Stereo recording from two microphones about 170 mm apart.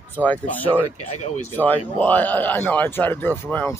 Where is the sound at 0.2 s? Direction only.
10° left (ahead or behind).